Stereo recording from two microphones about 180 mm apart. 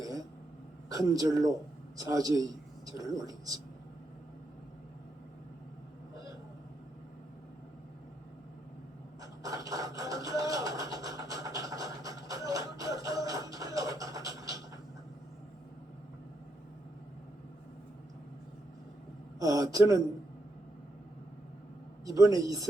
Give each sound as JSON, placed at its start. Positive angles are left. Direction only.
{"t": 0.9, "sound": "a man's voice", "side_deg": -20}
{"t": 9.2, "sound": "a sound", "side_deg": -20}
{"t": 19.4, "sound": "a man's voice", "side_deg": -20}
{"t": 22.0, "sound": "speech", "side_deg": -20}